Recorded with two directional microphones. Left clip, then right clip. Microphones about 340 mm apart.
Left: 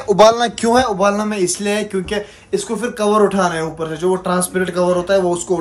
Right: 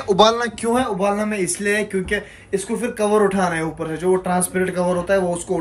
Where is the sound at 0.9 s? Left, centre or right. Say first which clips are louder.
Left 4 dB; centre.